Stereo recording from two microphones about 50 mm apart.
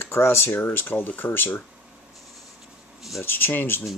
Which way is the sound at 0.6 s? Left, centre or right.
Left.